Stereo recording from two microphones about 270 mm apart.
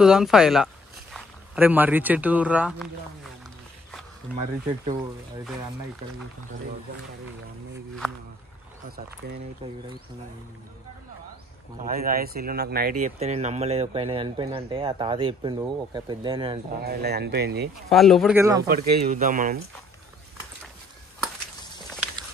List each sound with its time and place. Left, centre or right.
0.0 s speech: centre
9.2 s speech: right
11.8 s speech: right; by 16.5 s centre
16.8 s speech: right
17.8 s speech: centre
18.7 s speech: right